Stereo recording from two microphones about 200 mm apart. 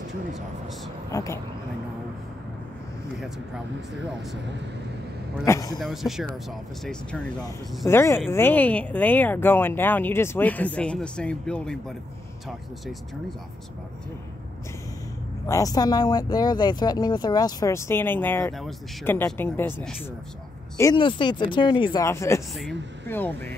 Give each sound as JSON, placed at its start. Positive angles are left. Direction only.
{"t": 1.1, "sound": "speech", "side_deg": 15}
{"t": 5.4, "sound": "speech", "side_deg": 15}
{"t": 5.8, "sound": "speech", "side_deg": 0}
{"t": 7.8, "sound": "speech", "side_deg": 15}
{"t": 15.4, "sound": "speech", "side_deg": 15}
{"t": 22.5, "sound": "speech", "side_deg": 0}